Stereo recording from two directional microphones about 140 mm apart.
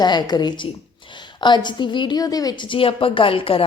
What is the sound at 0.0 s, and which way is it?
Speech, 30° left (ahead or behind).